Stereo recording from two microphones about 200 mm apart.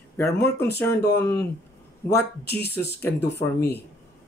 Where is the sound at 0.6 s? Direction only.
55° left (ahead or behind).